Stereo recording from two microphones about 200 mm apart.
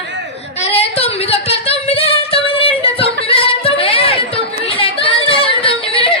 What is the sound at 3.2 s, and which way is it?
Music, 30° left (ahead or behind).